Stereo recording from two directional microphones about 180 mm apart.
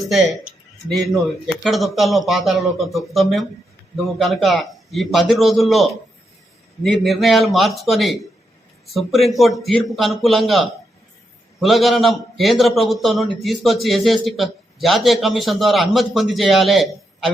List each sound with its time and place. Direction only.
0.0 s a man's voice: centre (ahead or behind)